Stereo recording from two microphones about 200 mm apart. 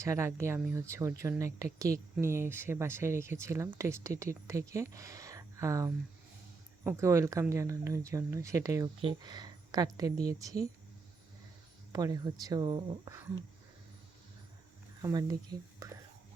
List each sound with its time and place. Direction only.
0.0 s speech: 15° right (ahead or behind)
11.9 s speech: 20° right (ahead or behind)
15.0 s speech: 20° right (ahead or behind)